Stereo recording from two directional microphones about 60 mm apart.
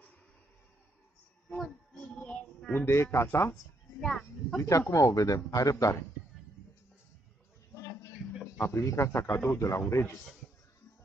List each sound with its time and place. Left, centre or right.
2.7 s a man's voice: left
4.0 s speech: centre
4.6 s speech: left
8.5 s a man's voice: left